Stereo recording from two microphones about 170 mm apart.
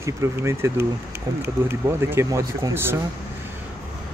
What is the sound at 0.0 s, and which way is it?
Speech, 15° right (ahead or behind).